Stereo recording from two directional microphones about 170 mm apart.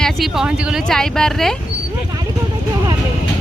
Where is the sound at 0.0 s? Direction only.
Centre (ahead or behind).